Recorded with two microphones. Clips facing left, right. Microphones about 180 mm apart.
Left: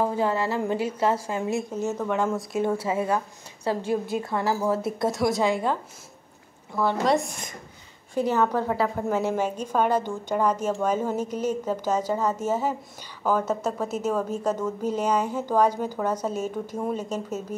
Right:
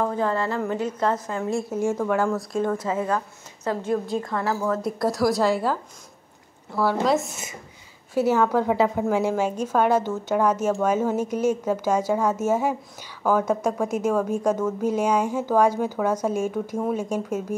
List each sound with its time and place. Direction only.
0.0 s a woman's voice: 10° left (ahead or behind)
1.7 s a woman's voice: 10° right (ahead or behind)
2.2 s a woman's voice: 5° left (ahead or behind)
4.2 s a woman's voice: 25° left (ahead or behind)
4.6 s a woman's voice: 5° left (ahead or behind); by 17.6 s 10° right (ahead or behind)